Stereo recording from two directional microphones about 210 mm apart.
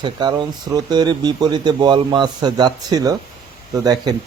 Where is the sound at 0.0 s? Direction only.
20° right (ahead or behind).